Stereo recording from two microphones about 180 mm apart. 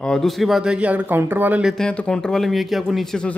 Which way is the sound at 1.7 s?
5° left (ahead or behind).